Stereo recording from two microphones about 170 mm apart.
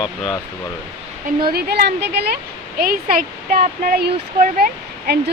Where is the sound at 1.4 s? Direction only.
65° right (ahead or behind); by 2.3 s 80° right.